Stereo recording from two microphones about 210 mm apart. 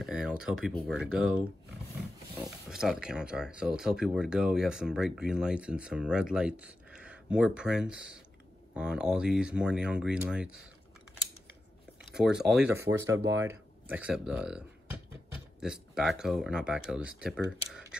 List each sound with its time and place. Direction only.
0.0 s speech: 5° right (ahead or behind)
2.3 s speech: 5° right (ahead or behind)
12.1 s speech: 5° right (ahead or behind)